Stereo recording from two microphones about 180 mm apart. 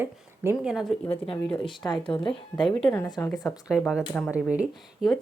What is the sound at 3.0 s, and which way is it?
Speech, 20° left (ahead or behind).